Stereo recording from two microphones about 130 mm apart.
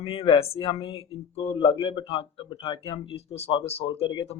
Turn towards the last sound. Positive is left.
turn(degrees=40)  # may be behind; listen again after turning